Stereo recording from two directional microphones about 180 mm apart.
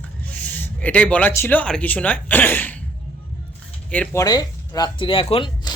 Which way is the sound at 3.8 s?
5° left (ahead or behind).